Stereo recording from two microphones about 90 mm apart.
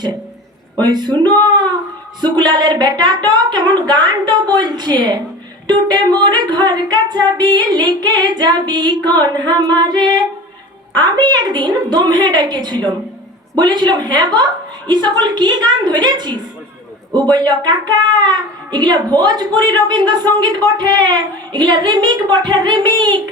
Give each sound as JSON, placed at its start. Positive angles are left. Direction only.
{"t": 0.8, "sound": "speech", "side_deg": -55}